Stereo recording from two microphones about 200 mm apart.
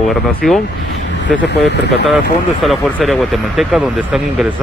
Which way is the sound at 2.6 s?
Centre (ahead or behind).